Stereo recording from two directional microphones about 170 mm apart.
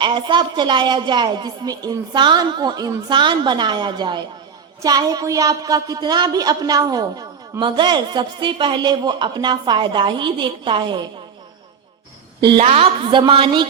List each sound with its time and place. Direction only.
0.0 s a woman's voice: 25° right (ahead or behind)
12.4 s a woman's voice: 35° right (ahead or behind)